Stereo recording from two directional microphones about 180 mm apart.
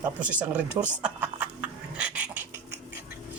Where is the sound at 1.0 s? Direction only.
10° right (ahead or behind).